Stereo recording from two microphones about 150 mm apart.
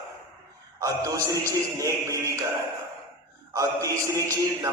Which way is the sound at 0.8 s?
20° right (ahead or behind).